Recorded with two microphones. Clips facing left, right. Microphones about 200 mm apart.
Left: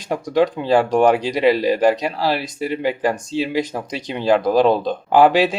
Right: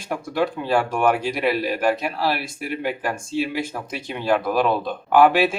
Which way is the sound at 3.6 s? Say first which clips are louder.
Left 3 dB; 15° left (ahead or behind).